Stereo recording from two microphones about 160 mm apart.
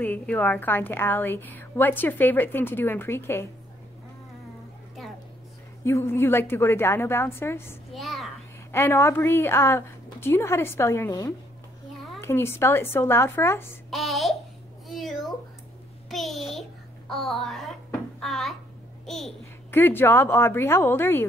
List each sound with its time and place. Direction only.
0.0 s a woman's voice: 10° left (ahead or behind)
5.0 s a sound: centre (ahead or behind)
5.9 s a woman's voice: 15° left (ahead or behind)
7.9 s a sound: centre (ahead or behind)
8.7 s a woman's voice: 15° left (ahead or behind)
13.8 s child singing: centre (ahead or behind)
14.9 s babbling: centre (ahead or behind)
16.1 s a child's voice: centre (ahead or behind)
19.7 s a woman's voice: 15° left (ahead or behind)